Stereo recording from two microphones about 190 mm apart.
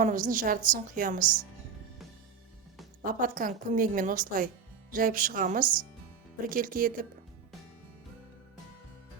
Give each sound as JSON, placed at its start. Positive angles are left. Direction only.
{"t": 0.0, "sound": "a woman's voice", "side_deg": -45}
{"t": 3.0, "sound": "a woman's voice", "side_deg": -45}